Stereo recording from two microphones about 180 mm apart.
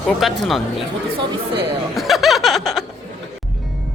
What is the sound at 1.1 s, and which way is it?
Speech, 30° right (ahead or behind).